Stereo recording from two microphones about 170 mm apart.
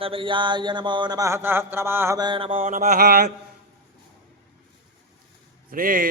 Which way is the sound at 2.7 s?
55° right (ahead or behind).